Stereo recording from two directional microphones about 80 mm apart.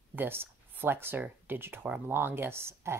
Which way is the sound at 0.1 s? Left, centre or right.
Right.